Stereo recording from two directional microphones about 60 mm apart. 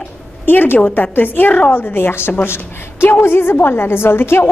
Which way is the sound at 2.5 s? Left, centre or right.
Left.